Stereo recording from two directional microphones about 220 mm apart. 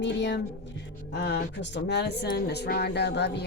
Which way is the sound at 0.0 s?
55° left (ahead or behind).